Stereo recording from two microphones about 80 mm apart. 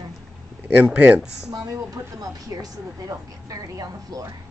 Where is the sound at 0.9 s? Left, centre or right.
Centre.